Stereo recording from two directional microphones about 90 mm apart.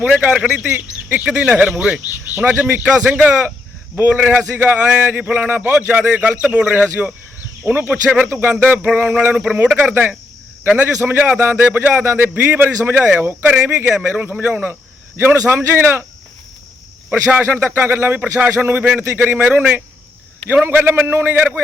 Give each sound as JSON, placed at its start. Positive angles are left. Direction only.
{"t": 0.0, "sound": "a man's voice", "side_deg": -15}
{"t": 8.3, "sound": "a man's voice", "side_deg": -25}
{"t": 17.1, "sound": "a man's voice", "side_deg": -20}